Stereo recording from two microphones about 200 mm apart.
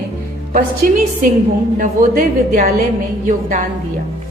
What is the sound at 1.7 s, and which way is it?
A woman's voice, 45° right (ahead or behind).